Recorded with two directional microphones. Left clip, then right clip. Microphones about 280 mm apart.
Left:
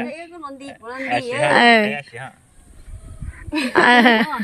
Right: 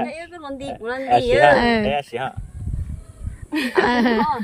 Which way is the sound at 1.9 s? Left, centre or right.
Right.